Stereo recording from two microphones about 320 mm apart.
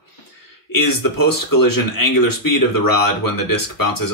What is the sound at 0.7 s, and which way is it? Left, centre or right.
Speech, left.